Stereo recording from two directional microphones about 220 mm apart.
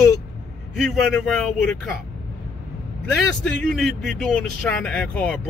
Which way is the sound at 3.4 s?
Centre (ahead or behind).